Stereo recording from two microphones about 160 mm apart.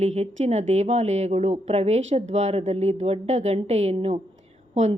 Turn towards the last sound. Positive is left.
turn(degrees=-45)  # may be behind; listen again after turning